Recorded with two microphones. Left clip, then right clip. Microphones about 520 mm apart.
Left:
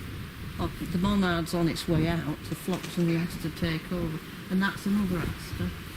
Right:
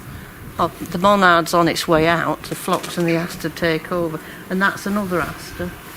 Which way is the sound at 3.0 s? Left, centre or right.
Centre.